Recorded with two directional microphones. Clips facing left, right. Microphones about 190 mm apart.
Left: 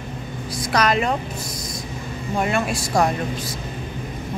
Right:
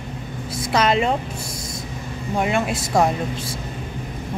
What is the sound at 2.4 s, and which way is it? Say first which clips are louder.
Speech: right 1 dB; 20° right (ahead or behind).